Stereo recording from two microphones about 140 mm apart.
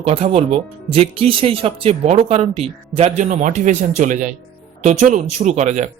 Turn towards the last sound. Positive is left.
turn(degrees=-55)  # may be behind; listen again after turning